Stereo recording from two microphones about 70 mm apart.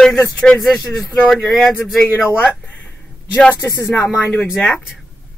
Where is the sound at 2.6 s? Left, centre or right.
Left.